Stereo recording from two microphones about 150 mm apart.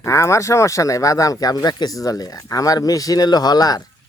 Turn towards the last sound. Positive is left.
turn(degrees=25)  # may be behind; listen again after turning